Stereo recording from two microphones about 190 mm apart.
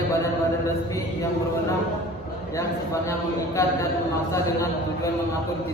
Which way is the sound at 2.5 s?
15° left (ahead or behind).